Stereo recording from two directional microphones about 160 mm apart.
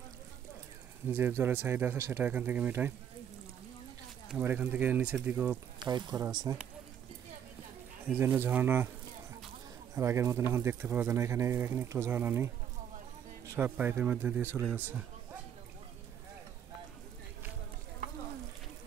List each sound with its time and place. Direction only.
1.0 s speech: 15° right (ahead or behind)
4.3 s speech: 10° right (ahead or behind)
5.8 s speech: 25° right (ahead or behind)
6.2 s speech: 15° right (ahead or behind)
8.1 s speech: 15° right (ahead or behind)
9.9 s speech: 15° right (ahead or behind)
13.5 s speech: 10° right (ahead or behind)